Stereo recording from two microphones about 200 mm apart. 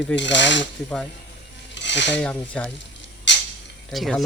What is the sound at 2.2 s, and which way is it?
Stir, 5° left (ahead or behind).